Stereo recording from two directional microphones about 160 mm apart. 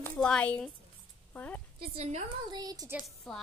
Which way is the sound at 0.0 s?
5° left (ahead or behind).